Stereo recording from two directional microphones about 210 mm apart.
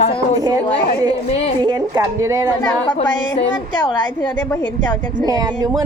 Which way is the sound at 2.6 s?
20° left (ahead or behind).